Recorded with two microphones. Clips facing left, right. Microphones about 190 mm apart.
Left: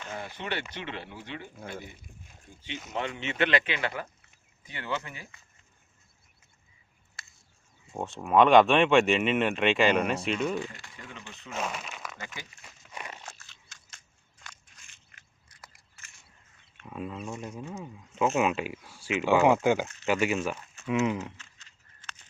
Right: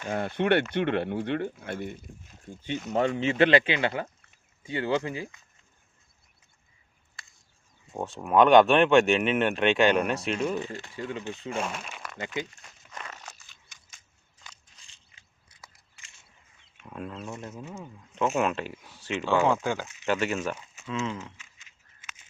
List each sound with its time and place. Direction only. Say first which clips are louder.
0.1 s speech: right 12 dB; 60° right (ahead or behind)
2.9 s speech: right 8 dB; 35° right (ahead or behind)
7.9 s speech: right 1 dB; centre (ahead or behind)
10.7 s speech: right 12 dB; 25° right (ahead or behind)
11.8 s a sound: even; 5° right (ahead or behind)
12.1 s speech: right 10 dB; 20° right (ahead or behind)
12.6 s crumpling: even; 10° left (ahead or behind)
16.7 s speech: left 1 dB; centre (ahead or behind)